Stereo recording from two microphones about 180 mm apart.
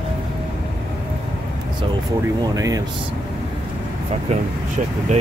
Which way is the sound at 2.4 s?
20° right (ahead or behind).